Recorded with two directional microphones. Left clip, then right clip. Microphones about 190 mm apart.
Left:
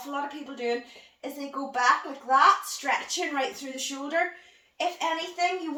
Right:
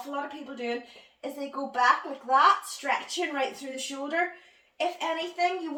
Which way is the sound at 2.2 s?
Centre (ahead or behind).